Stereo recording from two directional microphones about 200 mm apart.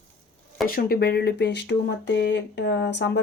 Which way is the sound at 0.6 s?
45° left (ahead or behind).